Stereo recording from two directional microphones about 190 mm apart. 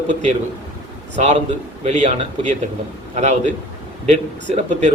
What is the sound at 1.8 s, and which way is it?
Speech, 35° right (ahead or behind).